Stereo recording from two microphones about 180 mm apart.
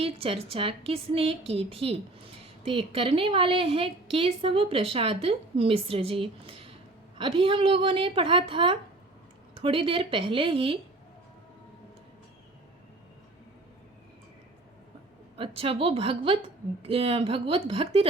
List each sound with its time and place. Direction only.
0.0 s a woman's voice: 30° right (ahead or behind)
15.4 s a woman's voice: 30° right (ahead or behind)